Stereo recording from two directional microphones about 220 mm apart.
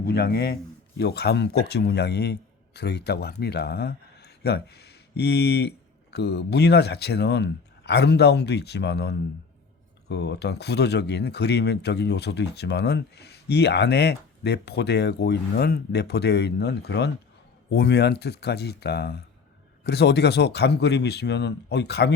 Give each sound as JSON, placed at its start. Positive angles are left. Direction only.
{"t": 0.0, "sound": "a man's voice", "side_deg": 45}